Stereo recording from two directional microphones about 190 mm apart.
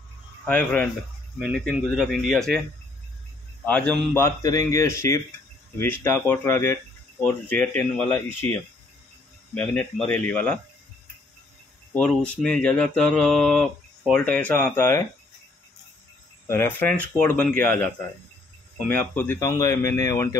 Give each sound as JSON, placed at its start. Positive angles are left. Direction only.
{"t": 0.5, "sound": "speech", "side_deg": 10}
{"t": 1.4, "sound": "speech", "side_deg": 0}
{"t": 3.6, "sound": "speech", "side_deg": 5}
{"t": 11.9, "sound": "speech", "side_deg": 5}
{"t": 16.4, "sound": "speech", "side_deg": 10}